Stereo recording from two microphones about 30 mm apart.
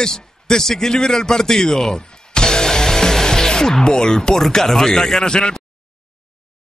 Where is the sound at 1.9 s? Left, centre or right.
Left.